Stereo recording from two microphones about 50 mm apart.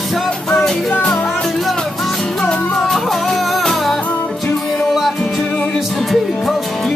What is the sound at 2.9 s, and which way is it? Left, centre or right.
Music, centre.